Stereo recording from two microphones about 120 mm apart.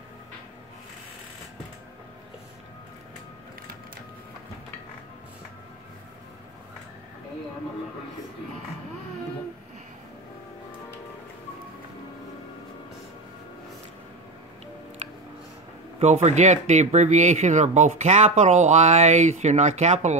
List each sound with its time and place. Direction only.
16.0 s speech: 70° right (ahead or behind)